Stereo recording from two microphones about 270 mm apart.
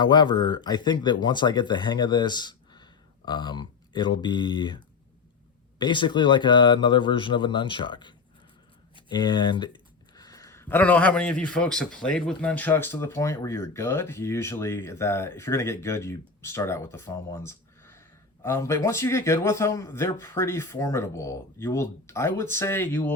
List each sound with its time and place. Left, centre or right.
0.0 s speech: centre
5.8 s speech: centre
10.2 s a sound: centre
11.5 s speech: centre